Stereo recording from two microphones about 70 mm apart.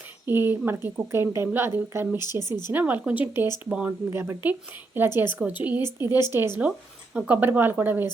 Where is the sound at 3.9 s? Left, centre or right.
Right.